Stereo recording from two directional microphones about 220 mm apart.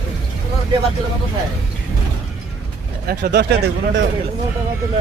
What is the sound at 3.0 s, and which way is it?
Speech, 45° right (ahead or behind).